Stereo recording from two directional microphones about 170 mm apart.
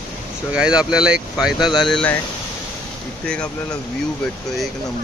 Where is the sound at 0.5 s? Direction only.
5° right (ahead or behind).